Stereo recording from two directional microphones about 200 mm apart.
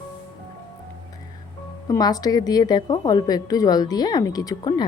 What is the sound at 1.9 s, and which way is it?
A woman's voice, 20° left (ahead or behind).